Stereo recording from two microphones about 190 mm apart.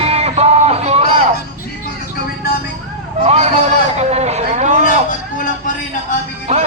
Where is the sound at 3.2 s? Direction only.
35° right (ahead or behind).